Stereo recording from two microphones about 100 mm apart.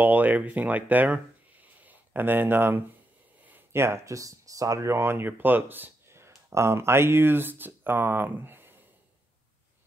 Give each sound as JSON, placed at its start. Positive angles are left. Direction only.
{"t": 0.0, "sound": "speech", "side_deg": -15}